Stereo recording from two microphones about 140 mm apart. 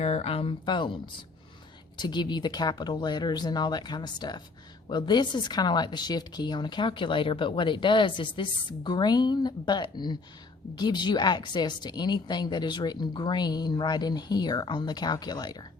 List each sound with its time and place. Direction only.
0.0 s a woman's voice: 50° left (ahead or behind)
2.0 s a woman's voice: 30° left (ahead or behind)